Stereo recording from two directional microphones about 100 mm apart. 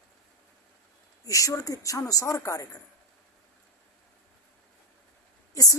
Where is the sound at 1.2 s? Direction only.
35° left (ahead or behind).